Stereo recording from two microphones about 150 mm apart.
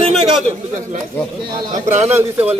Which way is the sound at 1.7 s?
55° right (ahead or behind).